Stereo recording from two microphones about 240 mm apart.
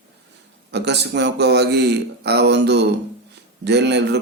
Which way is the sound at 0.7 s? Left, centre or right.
Right.